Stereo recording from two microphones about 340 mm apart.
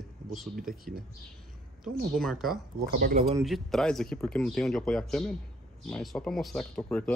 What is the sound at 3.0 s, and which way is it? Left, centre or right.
Speech, right.